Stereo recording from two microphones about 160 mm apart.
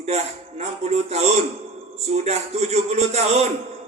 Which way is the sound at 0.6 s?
40° right (ahead or behind).